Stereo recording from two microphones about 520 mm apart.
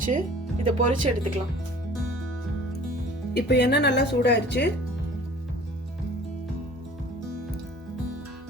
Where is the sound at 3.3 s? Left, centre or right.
Centre.